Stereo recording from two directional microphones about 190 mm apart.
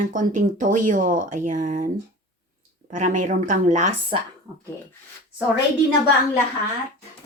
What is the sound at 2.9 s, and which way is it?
Speech, 45° right (ahead or behind).